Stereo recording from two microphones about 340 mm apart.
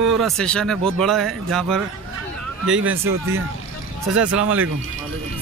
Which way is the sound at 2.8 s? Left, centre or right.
Right.